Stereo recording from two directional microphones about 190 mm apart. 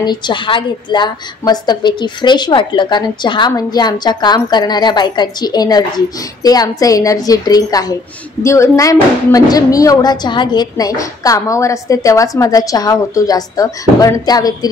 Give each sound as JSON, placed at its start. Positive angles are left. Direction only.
{"t": 0.0, "sound": "a woman's voice", "side_deg": 25}